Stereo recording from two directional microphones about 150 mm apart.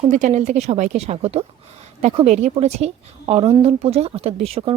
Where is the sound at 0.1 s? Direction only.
55° right (ahead or behind).